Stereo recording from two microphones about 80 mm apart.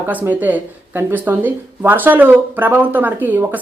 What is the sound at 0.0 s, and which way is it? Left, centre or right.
A woman's voice, right.